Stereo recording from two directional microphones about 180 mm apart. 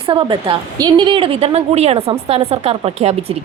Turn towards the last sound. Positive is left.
turn(degrees=-35)  # may be behind; listen again after turning